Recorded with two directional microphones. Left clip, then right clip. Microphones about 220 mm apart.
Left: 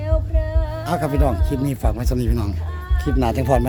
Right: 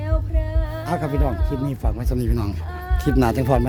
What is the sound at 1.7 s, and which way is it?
Speech, 10° left (ahead or behind).